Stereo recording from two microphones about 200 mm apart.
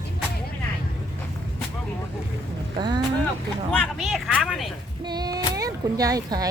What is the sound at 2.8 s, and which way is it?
Speech, 20° right (ahead or behind).